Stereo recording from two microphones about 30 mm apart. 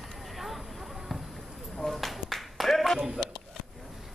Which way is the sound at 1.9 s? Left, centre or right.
Centre.